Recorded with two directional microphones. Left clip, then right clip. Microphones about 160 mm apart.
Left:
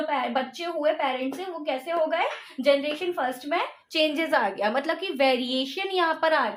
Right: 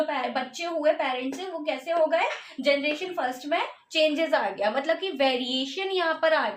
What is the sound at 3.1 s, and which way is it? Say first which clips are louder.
A woman's voice: even; 30° left (ahead or behind).